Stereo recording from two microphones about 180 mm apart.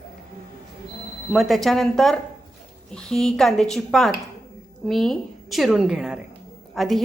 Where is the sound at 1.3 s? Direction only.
Centre (ahead or behind).